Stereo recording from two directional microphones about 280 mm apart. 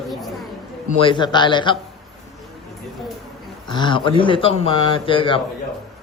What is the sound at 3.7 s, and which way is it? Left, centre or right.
A man's voice, centre.